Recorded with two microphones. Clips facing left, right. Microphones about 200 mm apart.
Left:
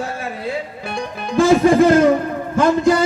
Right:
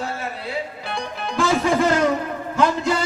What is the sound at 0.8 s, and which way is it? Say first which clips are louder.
Music: left 3 dB; 50° left (ahead or behind).